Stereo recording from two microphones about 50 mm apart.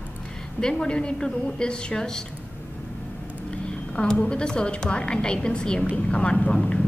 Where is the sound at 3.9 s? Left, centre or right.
Centre.